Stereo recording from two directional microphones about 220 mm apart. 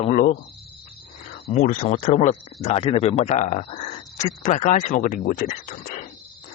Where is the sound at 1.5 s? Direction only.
35° left (ahead or behind).